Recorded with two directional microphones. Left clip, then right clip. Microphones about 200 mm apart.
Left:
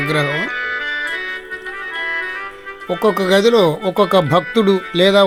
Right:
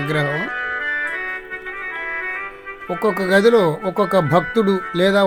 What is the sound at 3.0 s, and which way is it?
Speech, 5° left (ahead or behind).